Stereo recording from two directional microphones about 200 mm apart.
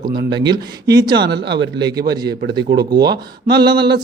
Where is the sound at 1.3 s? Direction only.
60° right (ahead or behind).